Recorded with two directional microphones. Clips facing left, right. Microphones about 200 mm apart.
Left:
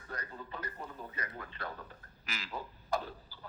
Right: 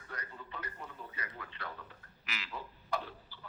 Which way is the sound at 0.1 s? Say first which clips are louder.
Left 3 dB; 35° left (ahead or behind).